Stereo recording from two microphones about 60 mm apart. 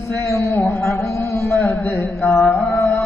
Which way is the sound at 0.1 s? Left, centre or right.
Left.